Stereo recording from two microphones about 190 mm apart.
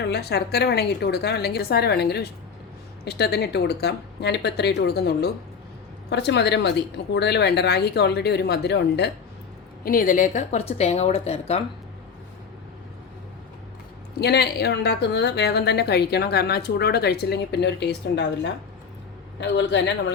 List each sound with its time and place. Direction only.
0.0 s a woman's voice: 60° left (ahead or behind)
9.8 s speech: 50° left (ahead or behind); by 11.6 s 30° left (ahead or behind)
14.2 s a woman's voice: 60° left (ahead or behind)